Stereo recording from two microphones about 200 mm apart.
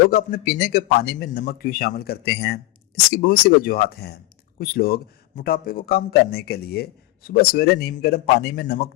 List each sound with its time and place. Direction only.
0.0 s a man's voice: 50° left (ahead or behind)